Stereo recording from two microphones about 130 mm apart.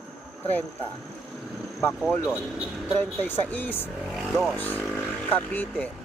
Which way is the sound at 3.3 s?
15° left (ahead or behind).